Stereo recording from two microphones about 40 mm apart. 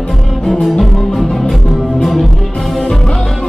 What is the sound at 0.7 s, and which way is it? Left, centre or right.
Music, centre.